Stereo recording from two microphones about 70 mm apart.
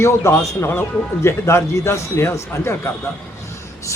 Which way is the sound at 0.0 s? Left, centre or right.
Left.